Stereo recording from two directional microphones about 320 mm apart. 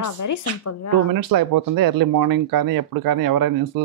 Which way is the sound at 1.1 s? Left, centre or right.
Right.